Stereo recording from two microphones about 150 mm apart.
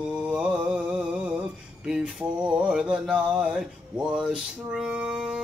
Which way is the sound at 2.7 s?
5° right (ahead or behind).